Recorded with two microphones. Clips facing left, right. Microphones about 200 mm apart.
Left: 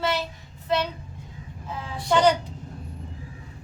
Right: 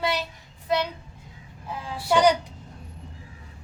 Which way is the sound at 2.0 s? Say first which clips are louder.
Even; 10° right (ahead or behind).